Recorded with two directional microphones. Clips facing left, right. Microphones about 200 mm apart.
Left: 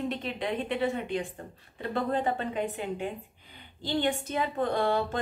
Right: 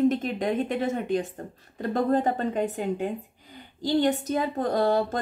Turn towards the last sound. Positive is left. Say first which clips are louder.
# right 4 dB
turn(degrees=-40)  # may be behind; listen again after turning